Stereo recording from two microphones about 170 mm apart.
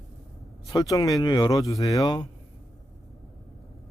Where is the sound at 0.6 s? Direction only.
20° left (ahead or behind).